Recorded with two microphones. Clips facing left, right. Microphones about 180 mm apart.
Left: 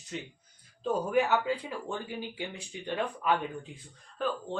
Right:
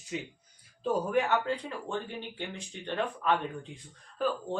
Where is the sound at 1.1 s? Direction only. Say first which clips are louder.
Left 1 dB; 5° left (ahead or behind).